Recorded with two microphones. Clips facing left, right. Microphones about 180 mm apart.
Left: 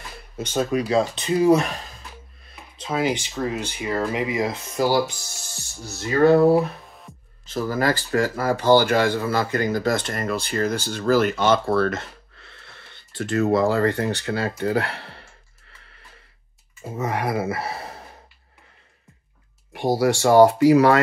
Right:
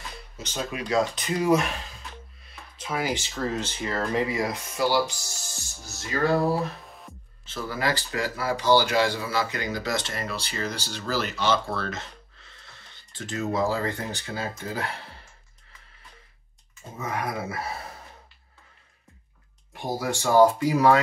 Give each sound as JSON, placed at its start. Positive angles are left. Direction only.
{"t": 0.4, "sound": "speech", "side_deg": 50}
{"t": 2.8, "sound": "speech", "side_deg": 25}
{"t": 5.9, "sound": "a sound", "side_deg": 60}
{"t": 7.4, "sound": "speech", "side_deg": 40}
{"t": 17.0, "sound": "speech", "side_deg": 75}
{"t": 19.7, "sound": "speech", "side_deg": 75}